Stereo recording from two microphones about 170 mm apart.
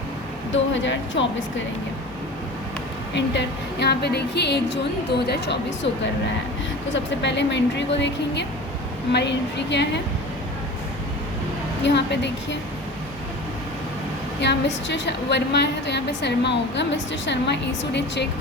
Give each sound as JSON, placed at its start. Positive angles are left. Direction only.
{"t": 0.5, "sound": "a woman's voice", "side_deg": 90}
{"t": 3.2, "sound": "a woman's voice", "side_deg": 85}
{"t": 6.9, "sound": "a woman's voice", "side_deg": 90}
{"t": 11.8, "sound": "a woman's voice", "side_deg": 90}
{"t": 14.4, "sound": "a woman's voice", "side_deg": 90}